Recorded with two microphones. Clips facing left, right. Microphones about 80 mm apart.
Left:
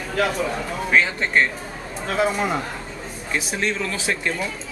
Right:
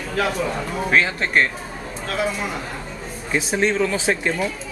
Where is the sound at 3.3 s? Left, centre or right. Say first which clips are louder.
Right 5 dB; right.